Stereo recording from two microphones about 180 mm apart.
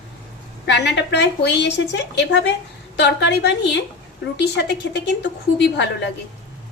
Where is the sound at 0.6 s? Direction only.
75° left (ahead or behind).